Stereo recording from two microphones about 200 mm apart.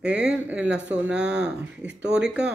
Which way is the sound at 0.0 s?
5° right (ahead or behind).